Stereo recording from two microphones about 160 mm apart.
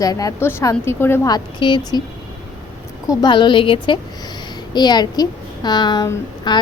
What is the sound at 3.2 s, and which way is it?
A woman's voice, 30° left (ahead or behind).